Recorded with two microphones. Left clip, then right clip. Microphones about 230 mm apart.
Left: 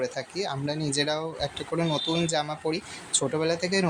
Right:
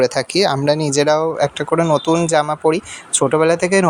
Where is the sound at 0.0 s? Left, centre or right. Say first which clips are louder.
Right 15 dB; right.